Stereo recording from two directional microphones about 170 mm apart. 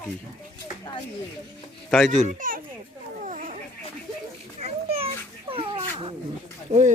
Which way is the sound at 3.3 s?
50° right (ahead or behind).